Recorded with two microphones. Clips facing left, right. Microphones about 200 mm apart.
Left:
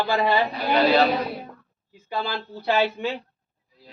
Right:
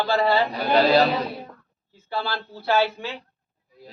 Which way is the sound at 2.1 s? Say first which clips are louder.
Even; 15° left (ahead or behind).